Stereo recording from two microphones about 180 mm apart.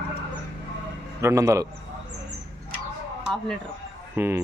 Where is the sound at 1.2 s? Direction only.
15° right (ahead or behind).